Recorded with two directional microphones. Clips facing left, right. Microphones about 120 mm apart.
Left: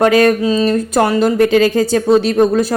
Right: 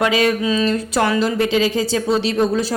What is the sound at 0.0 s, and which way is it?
A woman's voice, 50° left (ahead or behind).